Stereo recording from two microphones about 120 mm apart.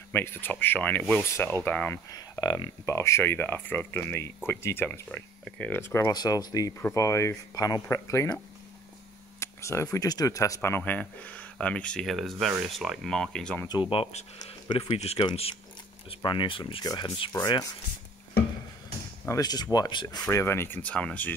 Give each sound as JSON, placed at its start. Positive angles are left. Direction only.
{"t": 0.1, "sound": "speech", "side_deg": 15}
{"t": 2.0, "sound": "speech", "side_deg": 30}
{"t": 9.4, "sound": "a sound", "side_deg": 25}
{"t": 9.9, "sound": "speech", "side_deg": 30}
{"t": 13.7, "sound": "speech", "side_deg": 45}
{"t": 16.2, "sound": "speech", "side_deg": 40}
{"t": 16.8, "sound": "speech", "side_deg": 35}
{"t": 19.2, "sound": "speech", "side_deg": 30}
{"t": 20.2, "sound": "speech", "side_deg": 20}